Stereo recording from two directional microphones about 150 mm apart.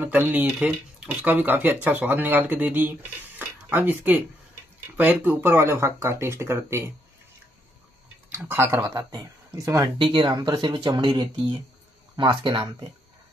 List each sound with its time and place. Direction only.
0.0 s speech: 10° right (ahead or behind)
8.3 s speech: 15° right (ahead or behind)
9.9 s speech: 35° right (ahead or behind)